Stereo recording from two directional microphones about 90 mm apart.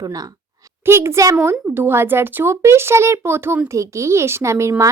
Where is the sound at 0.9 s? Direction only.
30° right (ahead or behind).